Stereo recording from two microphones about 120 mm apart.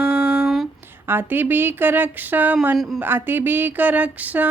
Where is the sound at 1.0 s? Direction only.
15° right (ahead or behind).